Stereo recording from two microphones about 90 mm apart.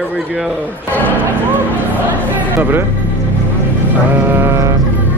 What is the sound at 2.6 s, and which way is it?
Speech, 25° right (ahead or behind).